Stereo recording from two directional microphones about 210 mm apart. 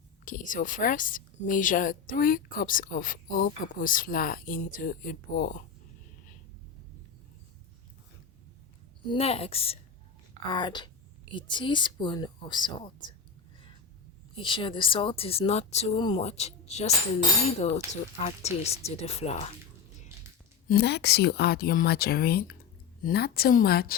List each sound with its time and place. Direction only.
0.3 s a woman's voice: 40° left (ahead or behind)
9.0 s speech: 30° left (ahead or behind)
14.3 s a woman's voice: 25° left (ahead or behind)
20.7 s speech: 50° left (ahead or behind)